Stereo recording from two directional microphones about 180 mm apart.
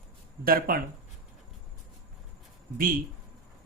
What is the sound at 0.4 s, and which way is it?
Speech, 55° right (ahead or behind).